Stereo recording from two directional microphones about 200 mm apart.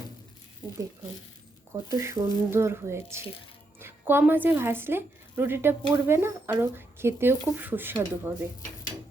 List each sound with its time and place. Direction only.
1.7 s a woman's voice: 15° right (ahead or behind)